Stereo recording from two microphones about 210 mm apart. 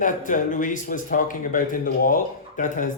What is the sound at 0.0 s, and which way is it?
A man's voice, 40° left (ahead or behind).